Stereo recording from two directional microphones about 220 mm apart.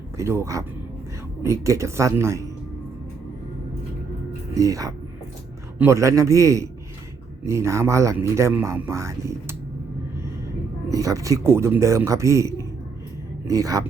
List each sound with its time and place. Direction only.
0.2 s speech: 10° right (ahead or behind)
4.5 s speech: 15° right (ahead or behind)
10.8 s speech: 15° right (ahead or behind)